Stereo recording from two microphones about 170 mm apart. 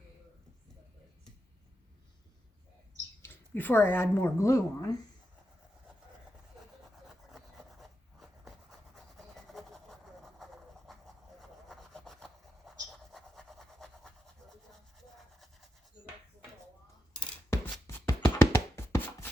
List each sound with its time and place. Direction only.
3.2 s speech: 10° left (ahead or behind)
6.9 s rub: centre (ahead or behind)
9.0 s train: centre (ahead or behind)
17.5 s a sound: 15° left (ahead or behind)
18.2 s music: 20° left (ahead or behind)